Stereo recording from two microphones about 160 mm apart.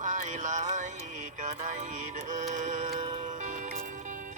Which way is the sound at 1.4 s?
50° right (ahead or behind).